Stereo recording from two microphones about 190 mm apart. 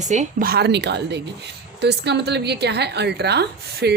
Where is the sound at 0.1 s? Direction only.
45° right (ahead or behind).